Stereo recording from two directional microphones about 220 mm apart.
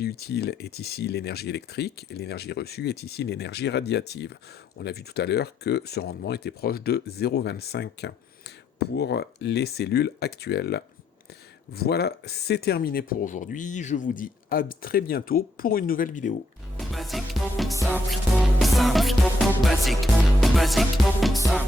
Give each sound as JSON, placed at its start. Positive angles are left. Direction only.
{"t": 0.0, "sound": "speech", "side_deg": 45}
{"t": 16.7, "sound": "music", "side_deg": 0}